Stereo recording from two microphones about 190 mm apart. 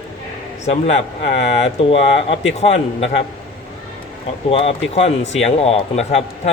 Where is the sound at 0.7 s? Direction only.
35° left (ahead or behind).